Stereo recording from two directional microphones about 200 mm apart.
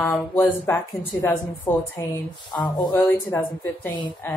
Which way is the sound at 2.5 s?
20° left (ahead or behind).